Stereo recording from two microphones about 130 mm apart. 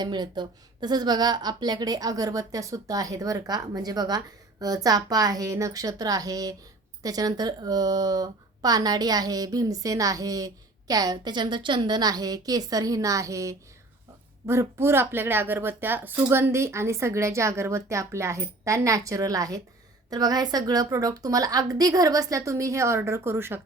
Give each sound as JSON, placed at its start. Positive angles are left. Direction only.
{"t": 0.0, "sound": "a woman's voice", "side_deg": -35}